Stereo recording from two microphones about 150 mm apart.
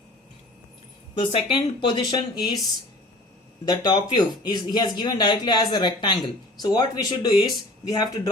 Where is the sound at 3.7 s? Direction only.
30° left (ahead or behind).